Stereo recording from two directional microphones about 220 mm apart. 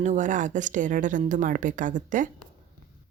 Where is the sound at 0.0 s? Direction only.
35° right (ahead or behind).